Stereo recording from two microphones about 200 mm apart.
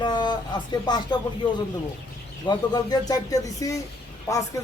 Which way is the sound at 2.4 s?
20° left (ahead or behind).